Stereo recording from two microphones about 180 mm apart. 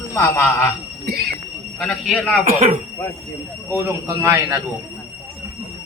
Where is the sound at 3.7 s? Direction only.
15° right (ahead or behind).